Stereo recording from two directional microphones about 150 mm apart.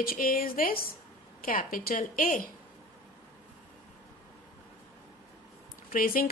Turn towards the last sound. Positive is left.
turn(degrees=70)  # may be behind; listen again after turning